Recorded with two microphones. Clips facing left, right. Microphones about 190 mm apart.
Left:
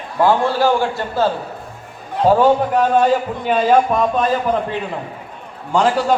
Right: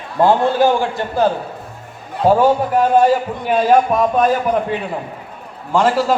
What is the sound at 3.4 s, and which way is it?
A man's voice, 10° right (ahead or behind).